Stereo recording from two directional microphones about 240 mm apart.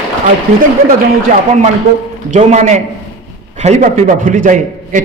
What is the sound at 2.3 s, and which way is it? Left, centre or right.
A man's voice, right.